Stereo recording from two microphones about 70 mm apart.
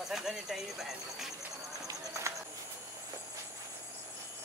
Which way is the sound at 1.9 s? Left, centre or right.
Right.